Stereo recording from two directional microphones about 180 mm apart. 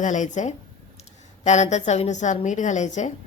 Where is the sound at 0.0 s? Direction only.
45° left (ahead or behind).